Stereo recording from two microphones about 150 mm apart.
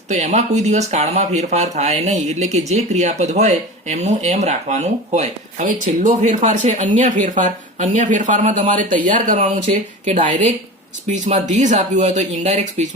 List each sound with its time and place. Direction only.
0.1 s a woman's voice: 50° right (ahead or behind)